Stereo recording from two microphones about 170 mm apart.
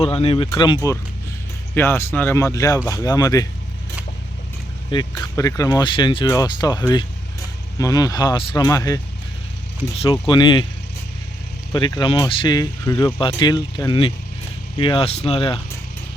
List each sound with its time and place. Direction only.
0.0 s speech: 35° left (ahead or behind)
0.5 s speech: 25° left (ahead or behind)
1.7 s speech: 15° left (ahead or behind)
4.9 s speech: 25° left (ahead or behind)
9.9 s speech: 30° left (ahead or behind)
11.7 s speech: 25° left (ahead or behind)